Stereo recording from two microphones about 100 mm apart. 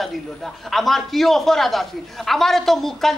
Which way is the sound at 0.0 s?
Centre (ahead or behind).